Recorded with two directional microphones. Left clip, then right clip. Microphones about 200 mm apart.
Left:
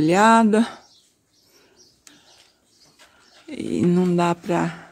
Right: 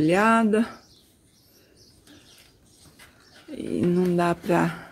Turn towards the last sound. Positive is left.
turn(degrees=0)  # may be behind; listen again after turning